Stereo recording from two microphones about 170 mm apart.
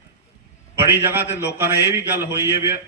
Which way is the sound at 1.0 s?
10° right (ahead or behind).